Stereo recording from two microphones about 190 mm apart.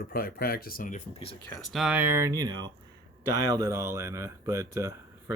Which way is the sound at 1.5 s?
Centre (ahead or behind).